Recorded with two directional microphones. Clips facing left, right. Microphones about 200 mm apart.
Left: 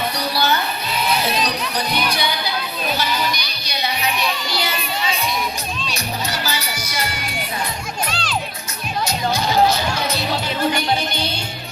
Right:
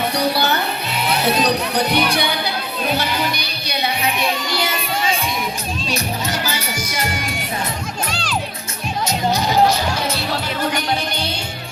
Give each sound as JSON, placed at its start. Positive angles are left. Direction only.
{"t": 0.2, "sound": "music", "side_deg": -60}
{"t": 1.7, "sound": "speech", "side_deg": -60}
{"t": 3.7, "sound": "music", "side_deg": -55}
{"t": 6.4, "sound": "music", "side_deg": -50}
{"t": 8.1, "sound": "music", "side_deg": -10}